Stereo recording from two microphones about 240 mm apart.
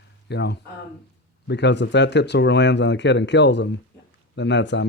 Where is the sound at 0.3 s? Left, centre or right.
Left.